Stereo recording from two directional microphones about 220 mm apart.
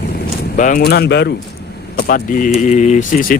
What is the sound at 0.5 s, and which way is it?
Speech, 35° left (ahead or behind).